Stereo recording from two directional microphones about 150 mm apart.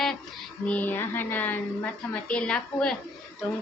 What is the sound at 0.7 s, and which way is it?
A woman's voice, 10° left (ahead or behind).